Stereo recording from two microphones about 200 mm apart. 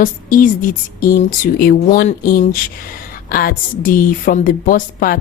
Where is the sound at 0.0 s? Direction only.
45° left (ahead or behind).